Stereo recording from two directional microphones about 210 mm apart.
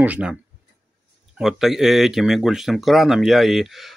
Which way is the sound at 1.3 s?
Centre (ahead or behind).